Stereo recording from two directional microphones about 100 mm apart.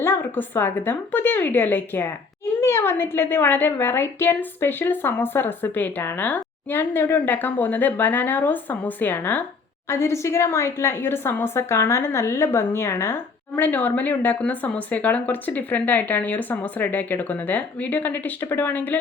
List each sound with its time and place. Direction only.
0.0 s a woman's voice: 25° left (ahead or behind)